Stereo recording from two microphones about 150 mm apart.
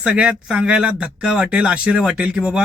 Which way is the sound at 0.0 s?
5° right (ahead or behind).